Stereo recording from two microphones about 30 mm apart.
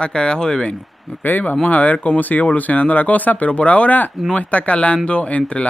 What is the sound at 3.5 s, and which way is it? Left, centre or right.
Speech, left.